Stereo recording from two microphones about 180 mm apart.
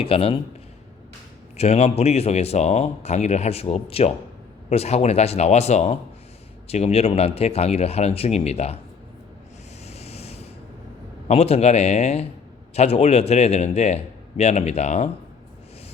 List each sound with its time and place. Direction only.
0.0 s speech: 30° left (ahead or behind)
1.5 s speech: 35° left (ahead or behind)
9.8 s ocean: 35° left (ahead or behind)
11.3 s speech: 35° left (ahead or behind)